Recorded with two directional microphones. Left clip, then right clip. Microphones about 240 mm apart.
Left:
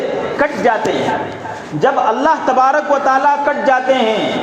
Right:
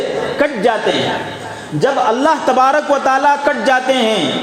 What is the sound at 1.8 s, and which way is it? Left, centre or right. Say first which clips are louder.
A man's voice: even; right.